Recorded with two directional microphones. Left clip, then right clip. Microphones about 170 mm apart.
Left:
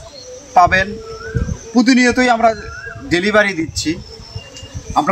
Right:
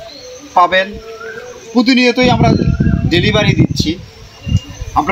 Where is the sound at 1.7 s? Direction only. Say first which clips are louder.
Right 2 dB; 20° left (ahead or behind).